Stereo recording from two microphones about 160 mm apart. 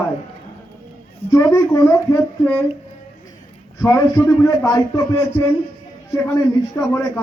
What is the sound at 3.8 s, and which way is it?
A man's voice, 20° left (ahead or behind).